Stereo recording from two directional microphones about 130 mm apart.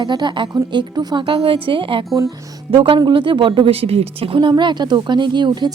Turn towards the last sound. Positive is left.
turn(degrees=-35)  # may be behind; listen again after turning